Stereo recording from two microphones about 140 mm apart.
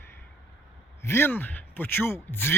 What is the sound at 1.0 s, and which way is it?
Speech, 15° left (ahead or behind).